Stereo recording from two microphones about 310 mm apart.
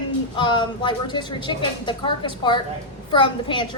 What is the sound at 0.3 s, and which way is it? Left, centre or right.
A woman's voice, centre.